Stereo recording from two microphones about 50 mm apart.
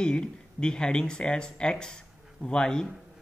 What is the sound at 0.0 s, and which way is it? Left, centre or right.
Speech, centre.